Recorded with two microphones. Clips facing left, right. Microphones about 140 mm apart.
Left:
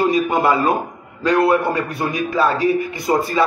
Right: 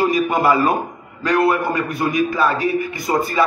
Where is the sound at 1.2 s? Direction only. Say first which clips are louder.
Left 2 dB; 25° left (ahead or behind).